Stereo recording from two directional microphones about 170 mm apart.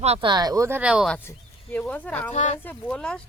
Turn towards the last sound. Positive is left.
turn(degrees=5)  # may be behind; listen again after turning